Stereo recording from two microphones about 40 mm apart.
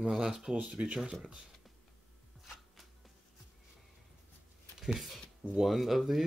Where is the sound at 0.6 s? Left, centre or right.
Right.